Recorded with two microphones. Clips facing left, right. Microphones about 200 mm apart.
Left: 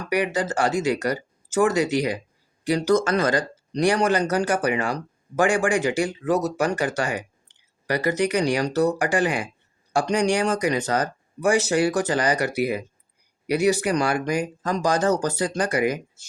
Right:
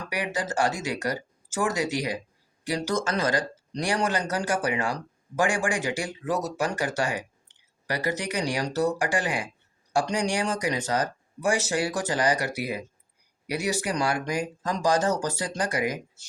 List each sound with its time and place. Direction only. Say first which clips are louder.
0.1 s speech: left 7 dB; 60° left (ahead or behind)